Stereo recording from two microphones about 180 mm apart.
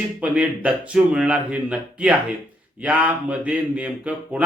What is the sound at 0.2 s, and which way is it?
A man's voice, 5° right (ahead or behind).